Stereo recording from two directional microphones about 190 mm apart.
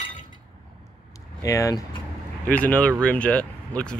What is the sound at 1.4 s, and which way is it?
Speech, 15° left (ahead or behind).